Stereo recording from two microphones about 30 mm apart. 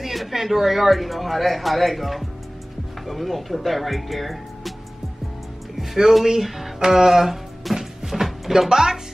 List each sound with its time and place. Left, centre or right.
0.0 s speech: centre
6.2 s speech: centre
6.8 s music: centre
8.6 s speech: centre